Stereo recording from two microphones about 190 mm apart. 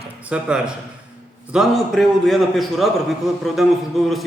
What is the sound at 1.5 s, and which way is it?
A man's voice, centre (ahead or behind).